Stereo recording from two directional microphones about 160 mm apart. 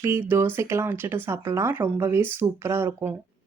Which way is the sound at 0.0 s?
15° right (ahead or behind).